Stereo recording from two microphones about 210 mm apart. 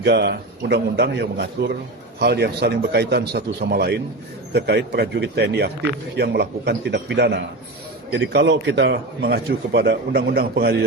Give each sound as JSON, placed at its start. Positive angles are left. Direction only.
{"t": 0.0, "sound": "a man's voice", "side_deg": -50}